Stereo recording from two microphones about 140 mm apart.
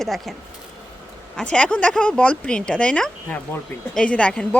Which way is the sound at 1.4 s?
10° left (ahead or behind).